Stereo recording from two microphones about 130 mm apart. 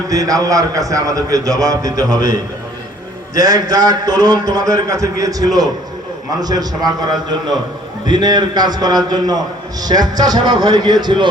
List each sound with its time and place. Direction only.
0.1 s a man's voice: 25° right (ahead or behind)
3.3 s a man's voice: 30° right (ahead or behind)